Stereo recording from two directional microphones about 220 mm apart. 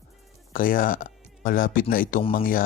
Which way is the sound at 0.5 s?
40° left (ahead or behind).